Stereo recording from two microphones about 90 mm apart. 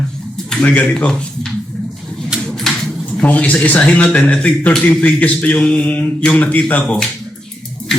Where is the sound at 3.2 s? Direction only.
15° left (ahead or behind).